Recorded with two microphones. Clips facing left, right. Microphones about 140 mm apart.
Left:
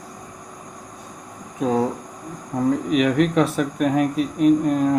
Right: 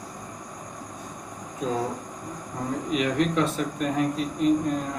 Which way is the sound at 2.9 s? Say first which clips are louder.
Left 4 dB; 70° left (ahead or behind).